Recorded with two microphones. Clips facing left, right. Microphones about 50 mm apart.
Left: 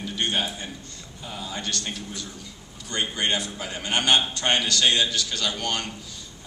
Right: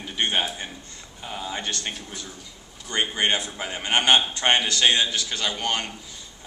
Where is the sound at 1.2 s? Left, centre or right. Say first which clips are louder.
Right 2 dB; right.